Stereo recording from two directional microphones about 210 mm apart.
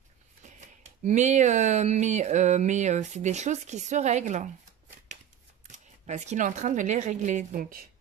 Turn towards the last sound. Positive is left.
turn(degrees=-40)  # may be behind; listen again after turning